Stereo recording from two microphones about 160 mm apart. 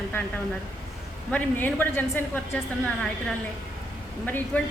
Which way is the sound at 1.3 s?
10° left (ahead or behind).